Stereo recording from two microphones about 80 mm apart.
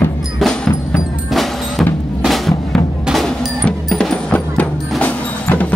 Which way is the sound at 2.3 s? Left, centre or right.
Centre.